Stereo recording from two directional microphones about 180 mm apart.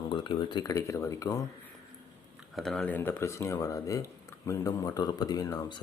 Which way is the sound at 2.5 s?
5° left (ahead or behind).